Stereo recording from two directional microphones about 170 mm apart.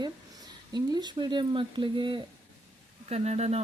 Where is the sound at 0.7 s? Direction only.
25° right (ahead or behind).